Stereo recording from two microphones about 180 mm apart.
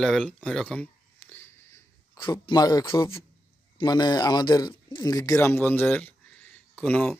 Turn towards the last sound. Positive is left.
turn(degrees=5)  # may be behind; listen again after turning